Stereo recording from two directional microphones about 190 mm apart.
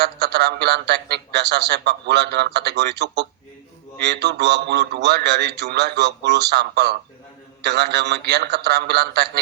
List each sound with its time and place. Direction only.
0.0 s speech: 60° right (ahead or behind)